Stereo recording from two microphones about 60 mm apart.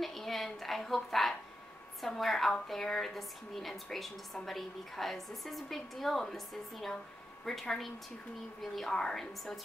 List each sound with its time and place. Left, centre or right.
0.0 s a woman's voice: centre